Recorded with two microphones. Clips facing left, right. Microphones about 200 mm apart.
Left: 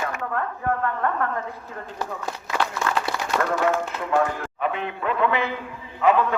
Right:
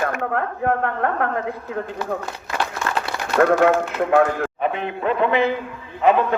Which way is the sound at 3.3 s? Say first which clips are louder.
Right 8 dB; 65° right (ahead or behind).